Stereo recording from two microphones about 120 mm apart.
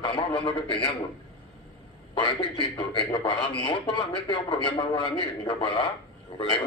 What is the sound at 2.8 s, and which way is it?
Speech, 45° left (ahead or behind).